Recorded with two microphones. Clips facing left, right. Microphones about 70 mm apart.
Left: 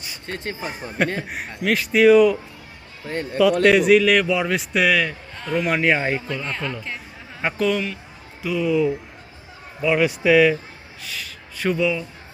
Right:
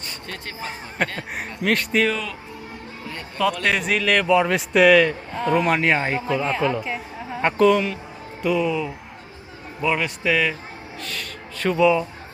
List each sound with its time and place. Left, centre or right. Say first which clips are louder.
0.3 s speech: left 7 dB; left
0.6 s a man's voice: left 2 dB; centre
3.6 s a man's voice: left 8 dB; centre